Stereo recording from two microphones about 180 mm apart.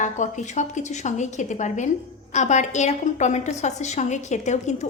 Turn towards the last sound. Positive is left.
turn(degrees=40)  # may be behind; listen again after turning